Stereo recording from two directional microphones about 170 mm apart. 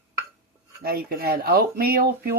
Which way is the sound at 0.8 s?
65° right (ahead or behind).